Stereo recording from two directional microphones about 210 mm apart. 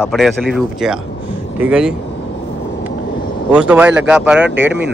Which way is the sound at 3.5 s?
5° right (ahead or behind).